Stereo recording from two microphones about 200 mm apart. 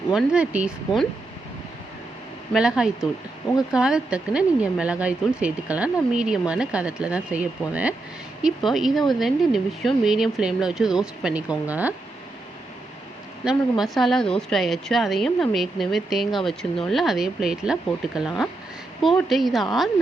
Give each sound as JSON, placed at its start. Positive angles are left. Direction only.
{"t": 0.1, "sound": "a woman's voice", "side_deg": -5}
{"t": 2.5, "sound": "a woman's voice", "side_deg": -5}
{"t": 13.4, "sound": "a woman's voice", "side_deg": -5}